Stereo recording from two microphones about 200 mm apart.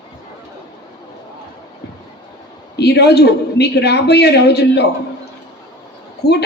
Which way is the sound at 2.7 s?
55° left (ahead or behind).